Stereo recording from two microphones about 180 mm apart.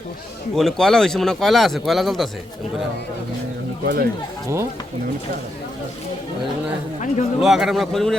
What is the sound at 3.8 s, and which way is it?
Speech, 55° right (ahead or behind).